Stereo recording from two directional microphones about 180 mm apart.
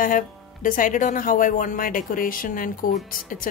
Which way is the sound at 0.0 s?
50° left (ahead or behind).